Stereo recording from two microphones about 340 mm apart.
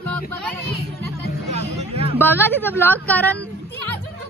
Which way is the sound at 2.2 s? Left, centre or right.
Centre.